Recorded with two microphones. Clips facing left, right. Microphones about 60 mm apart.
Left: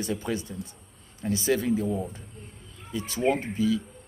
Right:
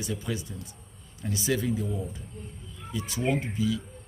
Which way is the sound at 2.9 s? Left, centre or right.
Left.